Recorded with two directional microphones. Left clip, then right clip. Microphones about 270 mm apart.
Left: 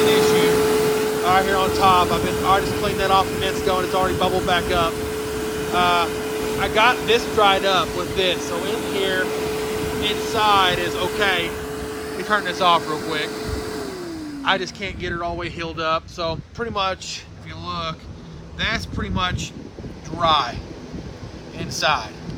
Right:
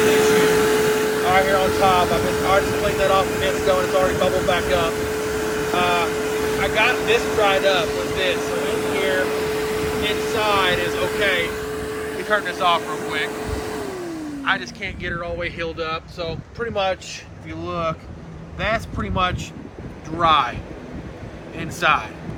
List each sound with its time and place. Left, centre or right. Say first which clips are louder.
0.0 s vehicle: even; left
6.2 s speech: right 2 dB; centre
13.4 s vehicle: right 1 dB; centre
14.4 s speech: left 1 dB; centre
18.6 s speech: right 1 dB; centre
21.6 s speech: right 2 dB; centre